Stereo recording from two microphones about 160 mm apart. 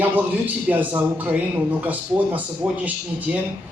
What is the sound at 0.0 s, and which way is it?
Speech, 10° right (ahead or behind).